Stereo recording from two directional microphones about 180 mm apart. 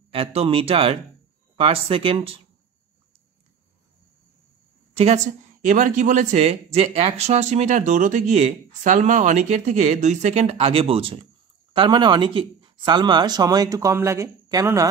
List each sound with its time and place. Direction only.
0.1 s speech: 30° right (ahead or behind)
4.9 s speech: 40° right (ahead or behind); by 14.9 s 20° right (ahead or behind)